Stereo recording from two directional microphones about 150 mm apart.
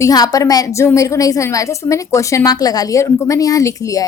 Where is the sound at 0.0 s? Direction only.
25° left (ahead or behind).